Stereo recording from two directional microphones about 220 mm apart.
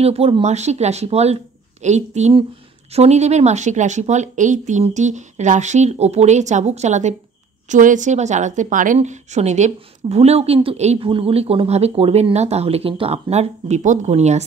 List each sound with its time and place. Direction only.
0.0 s a woman's voice: 25° right (ahead or behind)